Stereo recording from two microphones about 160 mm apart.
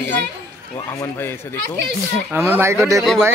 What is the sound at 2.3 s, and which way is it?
Speech, 15° right (ahead or behind).